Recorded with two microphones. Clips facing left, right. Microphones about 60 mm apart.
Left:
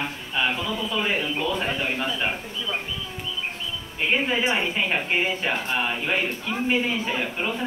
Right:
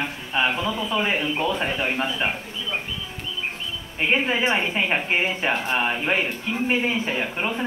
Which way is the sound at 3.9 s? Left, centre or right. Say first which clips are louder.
Right 2 dB; right.